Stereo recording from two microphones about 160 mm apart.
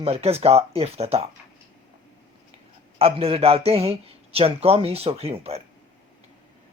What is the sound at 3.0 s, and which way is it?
Speech, 35° right (ahead or behind).